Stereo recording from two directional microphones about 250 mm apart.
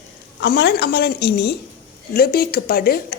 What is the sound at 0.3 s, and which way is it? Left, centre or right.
A woman's voice, left.